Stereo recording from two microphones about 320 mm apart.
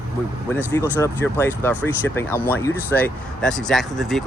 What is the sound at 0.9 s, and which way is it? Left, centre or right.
Speech, centre.